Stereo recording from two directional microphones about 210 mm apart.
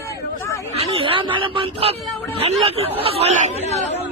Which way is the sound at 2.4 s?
30° right (ahead or behind).